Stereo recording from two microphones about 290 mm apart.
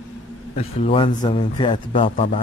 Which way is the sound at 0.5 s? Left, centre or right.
Centre.